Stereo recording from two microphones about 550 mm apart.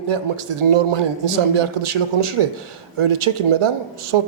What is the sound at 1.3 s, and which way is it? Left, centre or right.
A man's voice, right.